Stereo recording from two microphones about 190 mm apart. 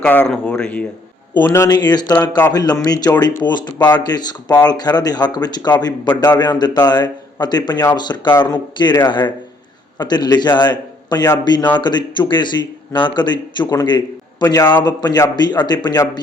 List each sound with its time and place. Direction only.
0.0 s speech: 5° left (ahead or behind)